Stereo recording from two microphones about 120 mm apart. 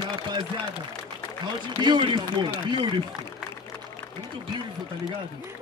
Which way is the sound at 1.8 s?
40° right (ahead or behind).